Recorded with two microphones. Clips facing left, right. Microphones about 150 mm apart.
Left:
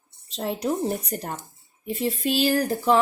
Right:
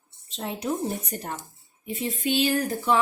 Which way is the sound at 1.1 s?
35° left (ahead or behind).